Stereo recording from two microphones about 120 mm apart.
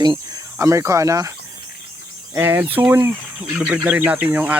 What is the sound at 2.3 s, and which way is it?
Speech, 20° right (ahead or behind).